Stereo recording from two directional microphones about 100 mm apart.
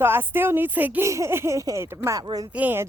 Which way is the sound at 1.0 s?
30° right (ahead or behind).